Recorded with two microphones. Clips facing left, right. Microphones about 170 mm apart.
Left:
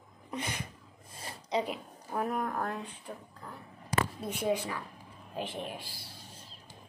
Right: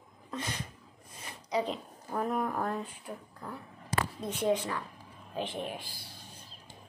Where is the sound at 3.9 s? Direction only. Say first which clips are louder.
Left 1 dB; 10° left (ahead or behind).